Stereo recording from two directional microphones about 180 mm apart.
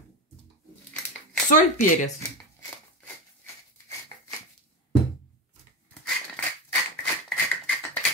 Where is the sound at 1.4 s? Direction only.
45° left (ahead or behind).